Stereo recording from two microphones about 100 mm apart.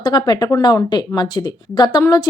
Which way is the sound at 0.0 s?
45° left (ahead or behind).